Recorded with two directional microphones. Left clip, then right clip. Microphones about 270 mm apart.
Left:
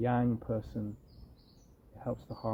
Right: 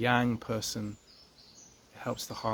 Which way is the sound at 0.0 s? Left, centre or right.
Centre.